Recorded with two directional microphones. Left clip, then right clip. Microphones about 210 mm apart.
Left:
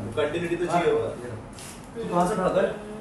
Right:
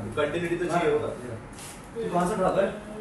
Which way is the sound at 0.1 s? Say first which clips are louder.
Left 1 dB; centre (ahead or behind).